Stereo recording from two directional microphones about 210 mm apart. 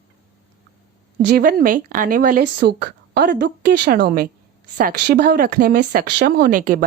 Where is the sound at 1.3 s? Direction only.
45° right (ahead or behind).